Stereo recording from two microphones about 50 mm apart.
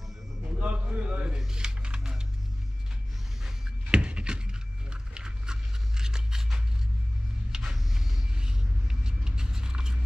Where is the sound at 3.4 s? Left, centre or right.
Centre.